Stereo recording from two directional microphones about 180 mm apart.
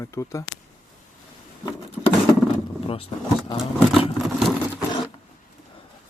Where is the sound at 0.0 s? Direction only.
15° left (ahead or behind).